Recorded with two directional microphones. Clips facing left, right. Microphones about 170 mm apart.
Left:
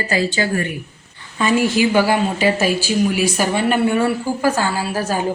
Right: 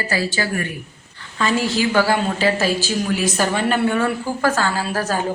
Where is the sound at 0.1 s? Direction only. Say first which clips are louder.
Left 4 dB; 20° left (ahead or behind).